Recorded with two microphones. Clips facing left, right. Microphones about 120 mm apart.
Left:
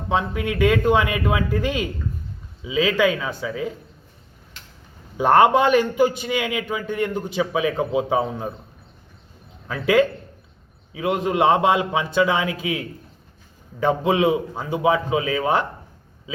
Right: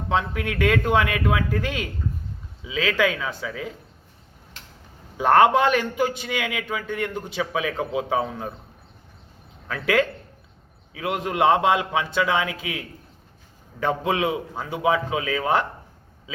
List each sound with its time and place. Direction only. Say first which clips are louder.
0.1 s a man's voice: left 2 dB; 5° left (ahead or behind)
5.1 s a man's voice: left 1 dB; 5° left (ahead or behind)
9.6 s a man's voice: left 4 dB; 5° left (ahead or behind)